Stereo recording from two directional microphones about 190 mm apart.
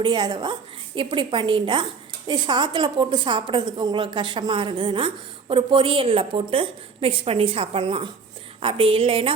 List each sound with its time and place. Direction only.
0.0 s a woman's voice: 25° right (ahead or behind)